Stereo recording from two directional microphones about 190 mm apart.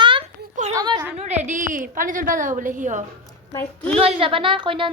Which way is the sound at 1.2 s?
40° right (ahead or behind).